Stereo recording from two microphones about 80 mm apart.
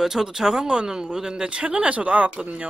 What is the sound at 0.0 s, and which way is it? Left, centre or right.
Speech, centre.